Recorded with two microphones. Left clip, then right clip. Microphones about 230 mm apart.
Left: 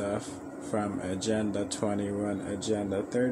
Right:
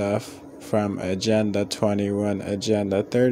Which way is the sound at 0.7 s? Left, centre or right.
Right.